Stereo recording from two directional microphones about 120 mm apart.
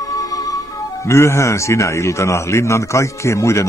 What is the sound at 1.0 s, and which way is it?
A man's voice, 25° left (ahead or behind).